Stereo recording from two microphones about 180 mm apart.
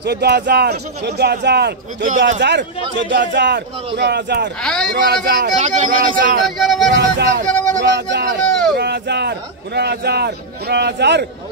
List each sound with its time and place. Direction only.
0.0 s a man's voice: 65° right (ahead or behind); by 2.4 s 45° right (ahead or behind)
3.0 s a man's voice: 80° right
4.6 s speech: 5° left (ahead or behind)
4.9 s a man's voice: 60° right (ahead or behind)
5.6 s a man's voice: 45° right (ahead or behind)
6.6 s speech: centre (ahead or behind)
6.9 s a man's voice: 70° right (ahead or behind)